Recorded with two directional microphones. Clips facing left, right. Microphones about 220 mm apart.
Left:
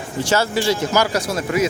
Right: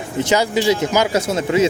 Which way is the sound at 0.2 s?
20° right (ahead or behind).